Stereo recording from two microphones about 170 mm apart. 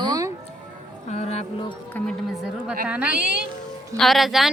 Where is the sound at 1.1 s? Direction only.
40° left (ahead or behind).